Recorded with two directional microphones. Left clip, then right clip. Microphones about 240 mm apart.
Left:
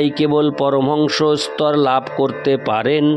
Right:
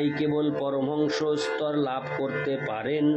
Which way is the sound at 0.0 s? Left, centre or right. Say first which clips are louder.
Left 10 dB; left.